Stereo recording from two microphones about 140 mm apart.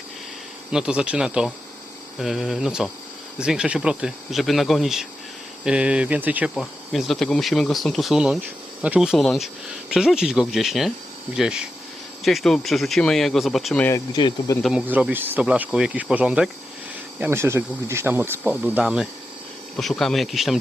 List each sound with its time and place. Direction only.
0.7 s speech: 5° right (ahead or behind)
6.5 s speech: centre (ahead or behind)
14.1 s speech: 30° left (ahead or behind)
14.6 s speech: 5° right (ahead or behind)
17.2 s speech: 15° right (ahead or behind); by 20.6 s centre (ahead or behind)